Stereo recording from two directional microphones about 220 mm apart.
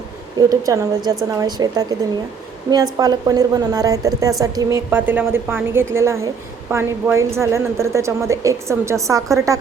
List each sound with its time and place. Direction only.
0.3 s a woman's voice: 15° right (ahead or behind)